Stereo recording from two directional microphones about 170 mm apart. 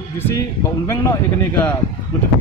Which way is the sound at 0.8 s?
15° left (ahead or behind).